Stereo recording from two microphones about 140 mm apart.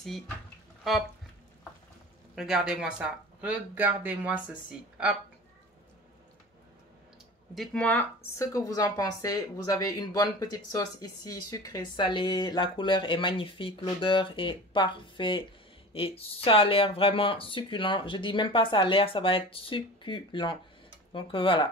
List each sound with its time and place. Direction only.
2.3 s speech: 5° right (ahead or behind)
7.5 s speech: 5° left (ahead or behind)
8.4 s speech: 25° left (ahead or behind)